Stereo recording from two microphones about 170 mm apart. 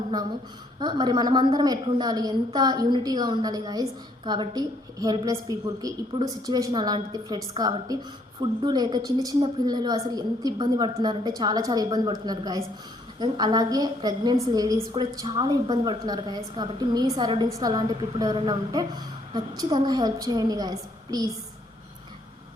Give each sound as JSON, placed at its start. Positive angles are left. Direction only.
{"t": 0.8, "sound": "a woman's voice", "side_deg": -25}